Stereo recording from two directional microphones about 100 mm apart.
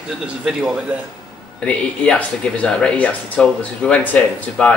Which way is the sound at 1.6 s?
10° left (ahead or behind).